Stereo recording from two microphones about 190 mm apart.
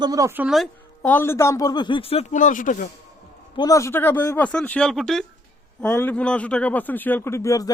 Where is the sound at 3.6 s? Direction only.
20° left (ahead or behind).